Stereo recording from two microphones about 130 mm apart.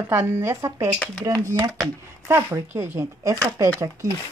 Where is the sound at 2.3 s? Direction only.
20° right (ahead or behind).